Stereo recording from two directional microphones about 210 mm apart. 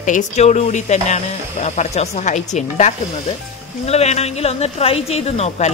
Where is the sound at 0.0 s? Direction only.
35° left (ahead or behind).